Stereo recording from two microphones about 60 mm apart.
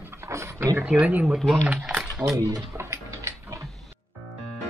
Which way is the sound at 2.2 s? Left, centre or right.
Right.